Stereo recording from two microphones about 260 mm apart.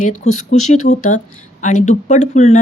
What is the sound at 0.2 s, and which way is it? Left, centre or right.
Speech, left.